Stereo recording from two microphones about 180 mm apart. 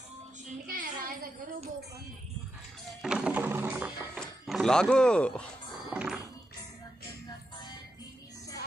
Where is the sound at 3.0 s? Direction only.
5° right (ahead or behind).